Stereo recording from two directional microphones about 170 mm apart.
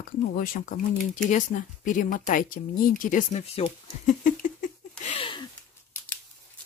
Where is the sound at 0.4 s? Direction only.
55° left (ahead or behind).